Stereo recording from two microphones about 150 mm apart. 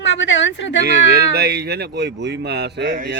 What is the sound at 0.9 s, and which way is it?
Speech, 90° right.